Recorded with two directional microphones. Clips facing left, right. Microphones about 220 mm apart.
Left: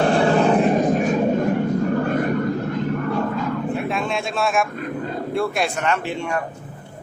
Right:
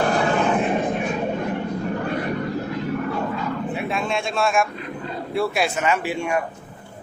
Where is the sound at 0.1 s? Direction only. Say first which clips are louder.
Left 4 dB; 30° left (ahead or behind).